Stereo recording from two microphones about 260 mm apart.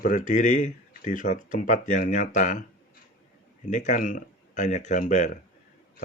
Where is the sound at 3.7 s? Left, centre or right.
Left.